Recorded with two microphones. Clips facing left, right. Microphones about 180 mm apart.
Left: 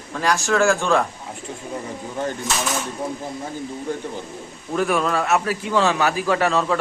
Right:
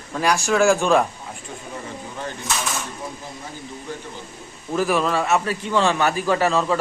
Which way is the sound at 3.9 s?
50° left (ahead or behind).